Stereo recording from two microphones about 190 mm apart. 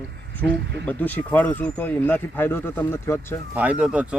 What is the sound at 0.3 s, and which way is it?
Speech, 10° left (ahead or behind).